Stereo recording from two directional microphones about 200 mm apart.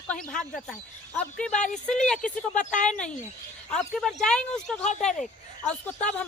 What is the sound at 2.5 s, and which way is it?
Speech, 40° left (ahead or behind).